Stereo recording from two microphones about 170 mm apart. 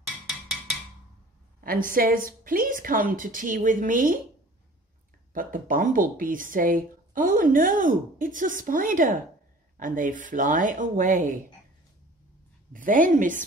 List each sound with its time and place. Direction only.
0.0 s music: centre (ahead or behind)
1.9 s a woman's voice: 55° right (ahead or behind)
5.3 s speech: 55° right (ahead or behind)
12.7 s speech: 55° right (ahead or behind)